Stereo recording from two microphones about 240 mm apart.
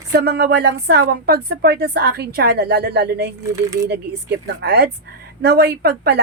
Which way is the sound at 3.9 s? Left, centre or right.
Right.